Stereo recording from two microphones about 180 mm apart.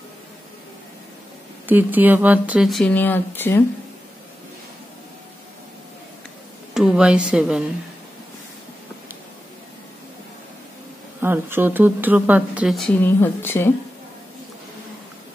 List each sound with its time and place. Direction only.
1.7 s speech: 10° right (ahead or behind); by 3.6 s 10° left (ahead or behind)
6.7 s speech: 5° right (ahead or behind)
11.1 s speech: 10° right (ahead or behind); by 13.7 s 10° left (ahead or behind)